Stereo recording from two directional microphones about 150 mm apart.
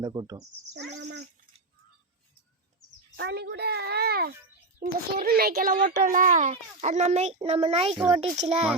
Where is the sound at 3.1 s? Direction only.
90° right.